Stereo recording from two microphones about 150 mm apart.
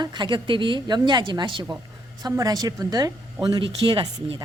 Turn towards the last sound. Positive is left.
turn(degrees=-30)  # may be behind; listen again after turning